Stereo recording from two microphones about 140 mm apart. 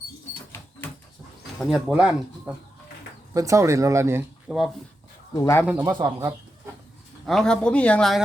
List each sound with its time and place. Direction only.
1.7 s speech: 5° right (ahead or behind)
3.3 s speech: 20° right (ahead or behind)
4.4 s speech: centre (ahead or behind)
5.3 s speech: 20° left (ahead or behind)
5.6 s speech: 15° right (ahead or behind)
7.3 s speech: 5° left (ahead or behind)